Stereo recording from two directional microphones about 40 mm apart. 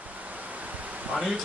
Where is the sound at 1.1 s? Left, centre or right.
Centre.